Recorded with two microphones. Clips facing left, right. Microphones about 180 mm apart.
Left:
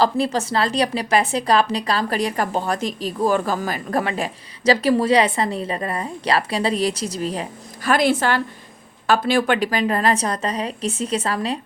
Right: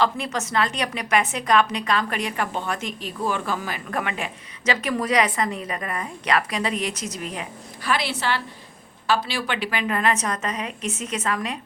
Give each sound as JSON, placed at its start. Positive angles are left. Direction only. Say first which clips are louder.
{"t": 0.0, "sound": "a woman's voice", "louder": "left 5 dB", "side_deg": 35}
{"t": 7.9, "sound": "a woman's voice", "louder": "left 7 dB", "side_deg": 45}